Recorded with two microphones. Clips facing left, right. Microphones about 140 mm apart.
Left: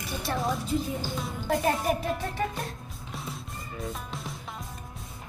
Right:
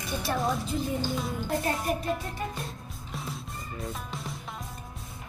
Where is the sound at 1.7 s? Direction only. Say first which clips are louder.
Left 1 dB; centre (ahead or behind).